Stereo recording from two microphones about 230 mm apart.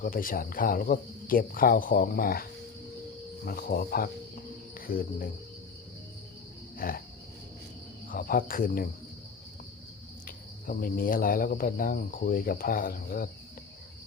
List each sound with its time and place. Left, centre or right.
0.0 s cricket: left
6.7 s wild animals: left
8.1 s cricket: left
10.2 s cricket: left